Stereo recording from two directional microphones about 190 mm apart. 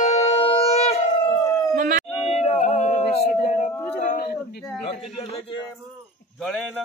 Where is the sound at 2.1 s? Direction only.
35° left (ahead or behind).